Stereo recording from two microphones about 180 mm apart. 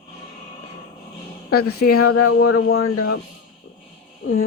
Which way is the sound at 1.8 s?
50° left (ahead or behind).